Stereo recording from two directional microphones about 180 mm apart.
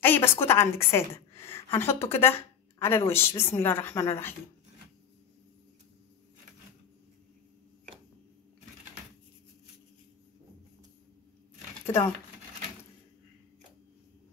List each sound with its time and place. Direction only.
0.0 s a woman's voice: 10° left (ahead or behind)
11.8 s speech: 15° left (ahead or behind)